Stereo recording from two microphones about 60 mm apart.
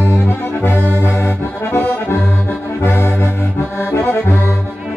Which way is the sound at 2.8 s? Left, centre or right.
Left.